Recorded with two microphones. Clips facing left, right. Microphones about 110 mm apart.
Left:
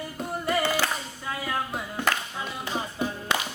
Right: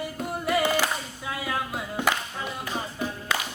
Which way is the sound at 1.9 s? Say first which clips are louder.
Right 2 dB; 15° right (ahead or behind).